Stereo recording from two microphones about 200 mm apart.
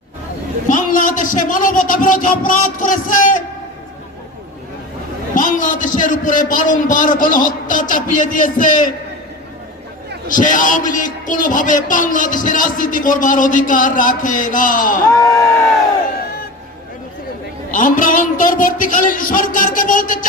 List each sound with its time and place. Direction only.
0.7 s a man's voice: 40° left (ahead or behind)
5.3 s a man's voice: 40° left (ahead or behind)
10.2 s a man's voice: 40° left (ahead or behind)
17.7 s a man's voice: 40° left (ahead or behind)